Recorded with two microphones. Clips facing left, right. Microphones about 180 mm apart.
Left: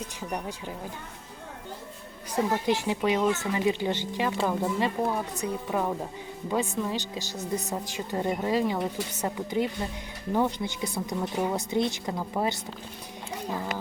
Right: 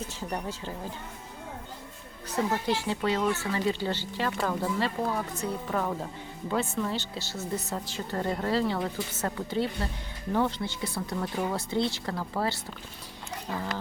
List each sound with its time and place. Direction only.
0.2 s speech: 15° left (ahead or behind)
2.3 s speech: 15° left (ahead or behind)